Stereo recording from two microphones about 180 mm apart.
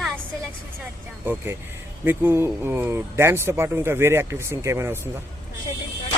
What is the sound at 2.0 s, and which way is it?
Speech, 10° right (ahead or behind).